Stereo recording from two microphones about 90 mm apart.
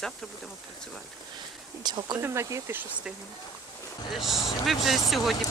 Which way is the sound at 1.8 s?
55° right (ahead or behind).